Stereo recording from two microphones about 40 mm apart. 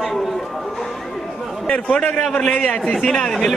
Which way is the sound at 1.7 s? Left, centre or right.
Left.